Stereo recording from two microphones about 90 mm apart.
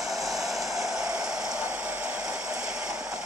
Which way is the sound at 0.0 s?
Centre (ahead or behind).